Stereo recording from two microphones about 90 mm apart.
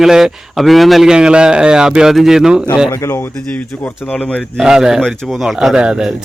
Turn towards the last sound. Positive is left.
turn(degrees=-10)  # may be behind; listen again after turning